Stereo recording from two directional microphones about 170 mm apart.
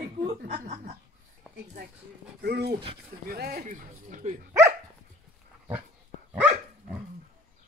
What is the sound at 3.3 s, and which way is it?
Speech, 65° right (ahead or behind).